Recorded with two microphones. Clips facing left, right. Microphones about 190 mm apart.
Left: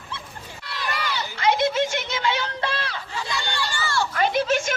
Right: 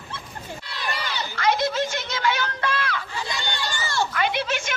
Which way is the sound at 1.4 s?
20° left (ahead or behind).